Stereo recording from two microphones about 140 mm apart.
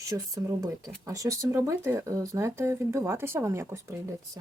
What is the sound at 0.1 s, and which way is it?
Speech, 25° right (ahead or behind).